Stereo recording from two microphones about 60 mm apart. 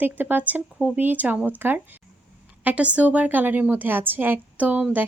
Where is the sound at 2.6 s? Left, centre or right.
Right.